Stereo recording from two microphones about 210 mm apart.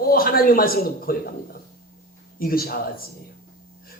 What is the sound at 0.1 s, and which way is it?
Speech, 45° left (ahead or behind).